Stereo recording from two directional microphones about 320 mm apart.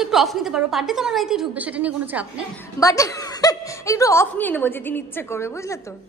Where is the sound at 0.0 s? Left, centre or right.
Centre.